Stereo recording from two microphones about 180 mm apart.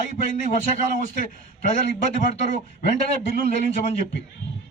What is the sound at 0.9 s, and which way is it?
Speech, 50° left (ahead or behind).